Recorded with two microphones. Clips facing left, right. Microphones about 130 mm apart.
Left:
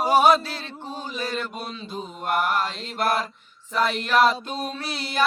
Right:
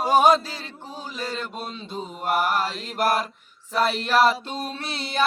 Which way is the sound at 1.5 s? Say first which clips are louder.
Even; centre (ahead or behind).